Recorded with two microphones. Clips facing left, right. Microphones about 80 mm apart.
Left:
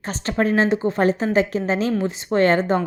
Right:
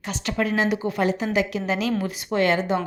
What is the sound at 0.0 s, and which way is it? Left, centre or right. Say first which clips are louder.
Speech: left 4 dB; left.